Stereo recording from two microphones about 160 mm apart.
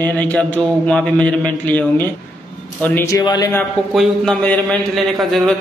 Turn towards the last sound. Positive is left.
turn(degrees=0)  # may be behind; listen again after turning